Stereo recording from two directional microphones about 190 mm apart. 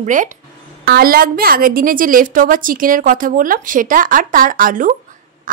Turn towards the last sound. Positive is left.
turn(degrees=-45)  # may be behind; listen again after turning